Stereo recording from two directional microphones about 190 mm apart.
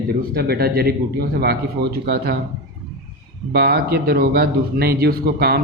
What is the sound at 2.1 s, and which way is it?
Speech, 55° right (ahead or behind).